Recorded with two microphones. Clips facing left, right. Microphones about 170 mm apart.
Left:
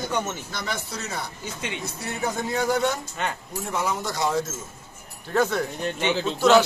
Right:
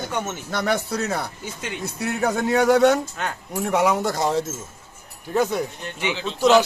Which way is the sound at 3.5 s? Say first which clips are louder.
Right 10 dB; 70° right (ahead or behind).